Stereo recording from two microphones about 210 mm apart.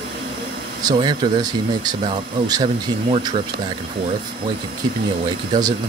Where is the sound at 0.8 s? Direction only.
20° right (ahead or behind).